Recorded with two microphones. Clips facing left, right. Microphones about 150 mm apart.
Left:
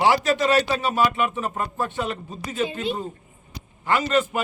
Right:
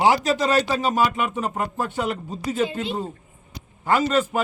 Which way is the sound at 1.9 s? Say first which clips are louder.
Right 2 dB; 10° right (ahead or behind).